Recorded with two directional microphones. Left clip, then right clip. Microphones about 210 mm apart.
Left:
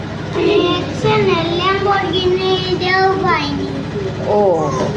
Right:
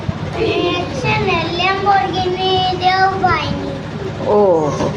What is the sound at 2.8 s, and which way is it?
Child singing, 15° right (ahead or behind).